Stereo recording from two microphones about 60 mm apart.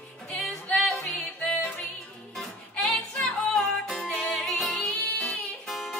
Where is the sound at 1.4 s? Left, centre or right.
Centre.